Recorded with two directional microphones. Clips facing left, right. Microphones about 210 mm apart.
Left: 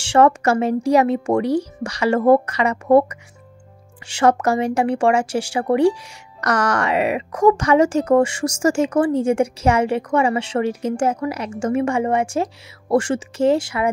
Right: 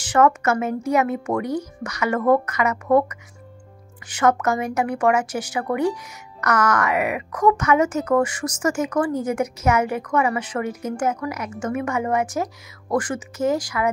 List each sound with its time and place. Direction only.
0.0 s speech: 30° left (ahead or behind)